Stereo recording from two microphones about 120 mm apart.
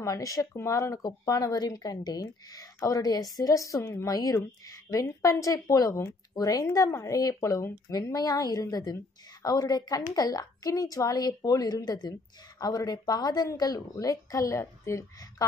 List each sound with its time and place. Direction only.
0.0 s a woman's voice: 30° left (ahead or behind)